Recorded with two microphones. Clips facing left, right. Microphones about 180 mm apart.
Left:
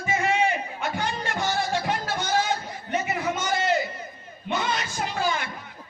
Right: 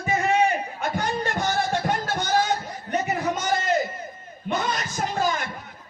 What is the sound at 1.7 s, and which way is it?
Music, 45° right (ahead or behind).